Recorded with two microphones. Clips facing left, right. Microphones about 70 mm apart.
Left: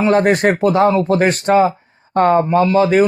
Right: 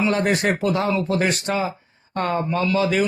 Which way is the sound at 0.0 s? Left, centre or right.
Left.